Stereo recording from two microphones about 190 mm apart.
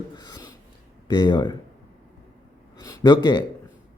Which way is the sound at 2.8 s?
20° left (ahead or behind).